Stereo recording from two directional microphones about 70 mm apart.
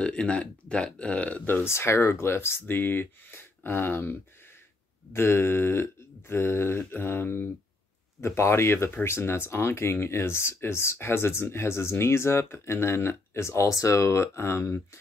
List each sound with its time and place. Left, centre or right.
0.0 s speech: centre; by 14.8 s left